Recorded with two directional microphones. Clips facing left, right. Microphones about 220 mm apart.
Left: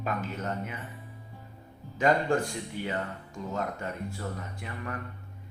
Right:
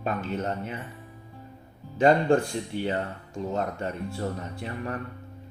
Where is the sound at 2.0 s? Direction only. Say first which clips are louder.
Right 5 dB; 30° right (ahead or behind).